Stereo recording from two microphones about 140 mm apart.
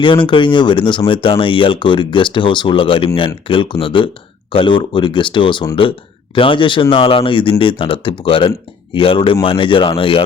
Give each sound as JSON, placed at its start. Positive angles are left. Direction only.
{"t": 0.0, "sound": "speech", "side_deg": 35}